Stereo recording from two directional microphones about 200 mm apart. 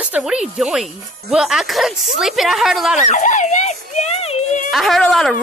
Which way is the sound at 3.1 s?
40° left (ahead or behind).